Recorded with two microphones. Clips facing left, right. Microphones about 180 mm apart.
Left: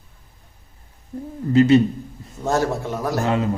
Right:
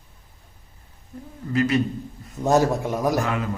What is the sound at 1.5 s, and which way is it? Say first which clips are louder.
Speech: left 8 dB; 25° left (ahead or behind).